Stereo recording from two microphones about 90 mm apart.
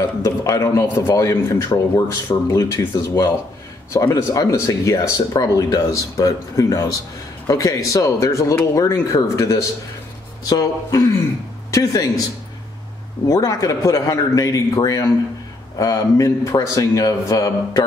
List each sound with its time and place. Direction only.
0.2 s speech: 35° left (ahead or behind)
13.3 s speech: 40° left (ahead or behind)